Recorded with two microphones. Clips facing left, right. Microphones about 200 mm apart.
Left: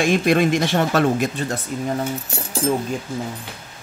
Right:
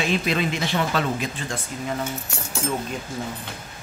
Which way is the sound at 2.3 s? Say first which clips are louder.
Left 5 dB; 35° left (ahead or behind).